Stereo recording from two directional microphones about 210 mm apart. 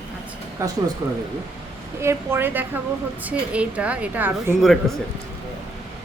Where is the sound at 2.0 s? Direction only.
10° right (ahead or behind).